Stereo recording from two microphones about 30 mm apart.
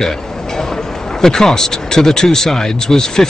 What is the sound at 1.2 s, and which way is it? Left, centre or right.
Speech, centre.